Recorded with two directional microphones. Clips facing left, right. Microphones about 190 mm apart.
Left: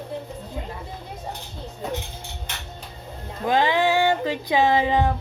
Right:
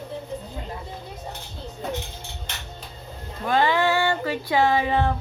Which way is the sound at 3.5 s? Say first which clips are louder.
Left 1 dB; 15° left (ahead or behind).